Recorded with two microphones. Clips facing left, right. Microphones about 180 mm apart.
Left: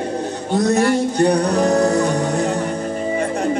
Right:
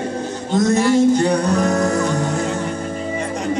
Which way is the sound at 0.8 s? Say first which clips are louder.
Right 2 dB; 60° left (ahead or behind).